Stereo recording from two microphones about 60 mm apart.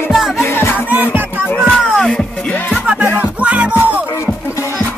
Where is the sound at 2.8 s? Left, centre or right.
Centre.